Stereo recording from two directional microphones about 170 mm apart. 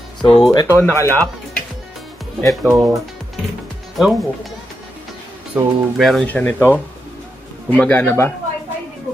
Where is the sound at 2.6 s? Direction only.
20° right (ahead or behind).